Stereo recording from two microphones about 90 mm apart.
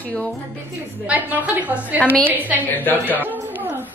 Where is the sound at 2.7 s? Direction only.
20° left (ahead or behind).